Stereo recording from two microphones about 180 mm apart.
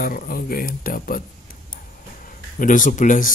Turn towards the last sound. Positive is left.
turn(degrees=45)  # may be behind; listen again after turning